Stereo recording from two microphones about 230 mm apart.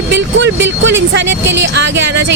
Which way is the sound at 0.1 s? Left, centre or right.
Right.